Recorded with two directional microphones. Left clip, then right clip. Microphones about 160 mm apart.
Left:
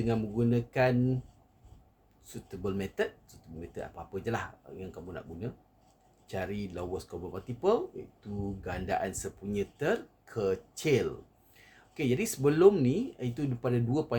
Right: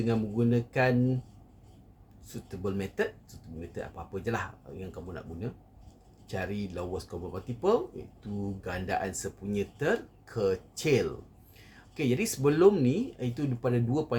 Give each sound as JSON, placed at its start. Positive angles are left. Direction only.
{"t": 0.0, "sound": "speech", "side_deg": 20}
{"t": 2.3, "sound": "speech", "side_deg": 20}